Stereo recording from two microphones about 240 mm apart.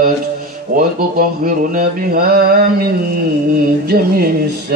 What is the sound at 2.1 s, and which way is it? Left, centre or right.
Mantra, right.